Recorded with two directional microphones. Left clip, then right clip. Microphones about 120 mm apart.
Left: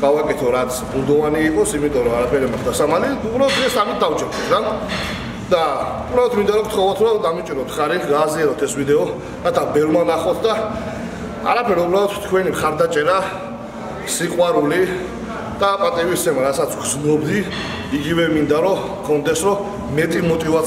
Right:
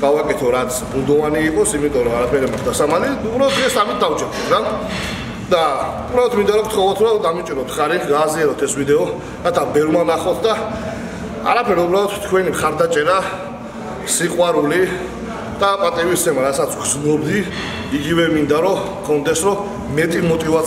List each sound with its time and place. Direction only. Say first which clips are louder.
0.0 s a man's voice: right 1 dB; centre (ahead or behind)